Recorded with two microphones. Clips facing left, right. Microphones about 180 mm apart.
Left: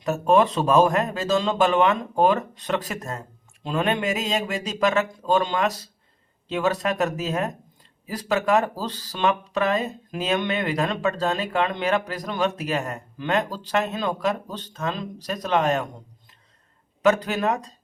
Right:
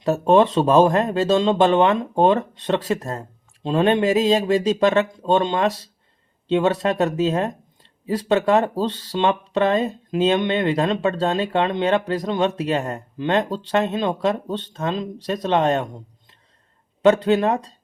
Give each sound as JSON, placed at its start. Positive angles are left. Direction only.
{"t": 0.0, "sound": "speech", "side_deg": -30}
{"t": 17.0, "sound": "speech", "side_deg": -30}